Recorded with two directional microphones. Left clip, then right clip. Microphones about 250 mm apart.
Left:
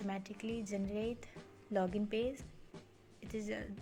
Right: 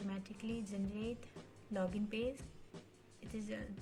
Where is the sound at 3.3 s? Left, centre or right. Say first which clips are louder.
Left 4 dB; left.